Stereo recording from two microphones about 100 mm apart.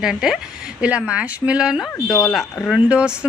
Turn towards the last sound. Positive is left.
turn(degrees=-10)  # may be behind; listen again after turning